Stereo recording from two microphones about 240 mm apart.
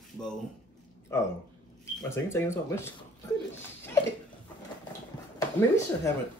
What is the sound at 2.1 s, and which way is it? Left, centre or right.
Speech, centre.